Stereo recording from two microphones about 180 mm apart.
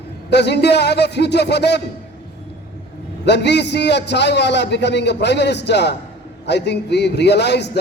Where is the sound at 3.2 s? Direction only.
70° left (ahead or behind).